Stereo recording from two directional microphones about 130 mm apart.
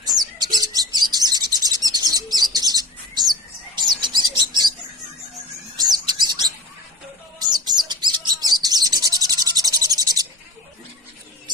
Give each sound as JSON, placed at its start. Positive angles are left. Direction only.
{"t": 0.0, "sound": "bird", "side_deg": -30}
{"t": 5.8, "sound": "bird", "side_deg": -35}